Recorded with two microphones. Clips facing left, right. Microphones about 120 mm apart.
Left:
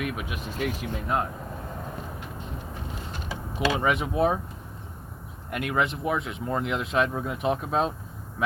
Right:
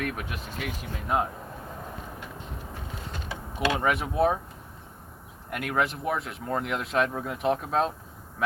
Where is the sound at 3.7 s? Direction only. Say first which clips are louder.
Left 1 dB; centre (ahead or behind).